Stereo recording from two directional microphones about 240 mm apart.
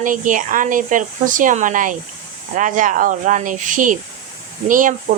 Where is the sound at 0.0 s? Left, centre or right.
Right.